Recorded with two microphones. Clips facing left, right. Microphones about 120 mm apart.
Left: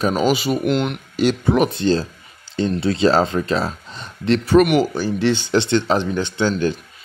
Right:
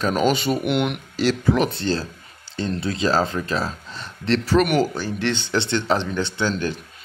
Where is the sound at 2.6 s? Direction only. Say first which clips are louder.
Left 6 dB; 25° left (ahead or behind).